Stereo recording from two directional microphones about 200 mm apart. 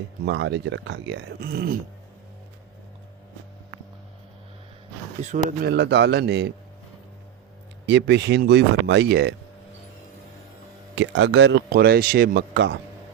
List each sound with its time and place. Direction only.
0.3 s speech: 65° right (ahead or behind)
5.2 s speech: 40° right (ahead or behind); by 6.5 s 60° right (ahead or behind)
7.9 s speech: 60° right (ahead or behind)
10.9 s speech: 70° right (ahead or behind)